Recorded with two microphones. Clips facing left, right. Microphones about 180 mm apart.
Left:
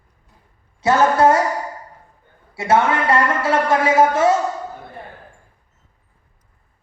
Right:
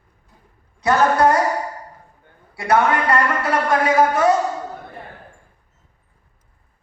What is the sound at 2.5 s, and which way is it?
A man's voice, 25° left (ahead or behind).